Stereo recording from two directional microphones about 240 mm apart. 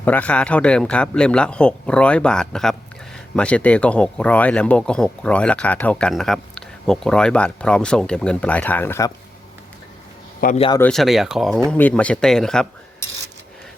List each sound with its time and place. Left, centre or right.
0.0 s a man's voice: centre
10.4 s a man's voice: left
10.7 s a man's voice: centre